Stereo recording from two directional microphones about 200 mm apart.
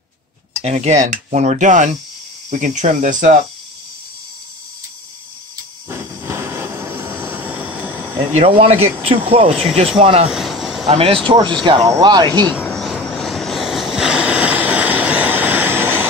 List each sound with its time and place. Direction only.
0.6 s speech: 35° right (ahead or behind)
5.9 s vehicle: 15° right (ahead or behind)
8.3 s speech: 35° right (ahead or behind)
10.2 s a sound: centre (ahead or behind)
10.9 s speech: 30° right (ahead or behind)
12.4 s vehicle: 5° left (ahead or behind); by 16.1 s 10° right (ahead or behind)